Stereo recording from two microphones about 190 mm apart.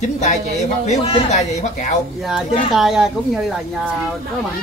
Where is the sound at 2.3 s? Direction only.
Centre (ahead or behind).